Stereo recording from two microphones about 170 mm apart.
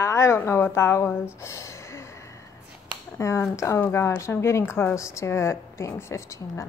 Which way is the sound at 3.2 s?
15° left (ahead or behind).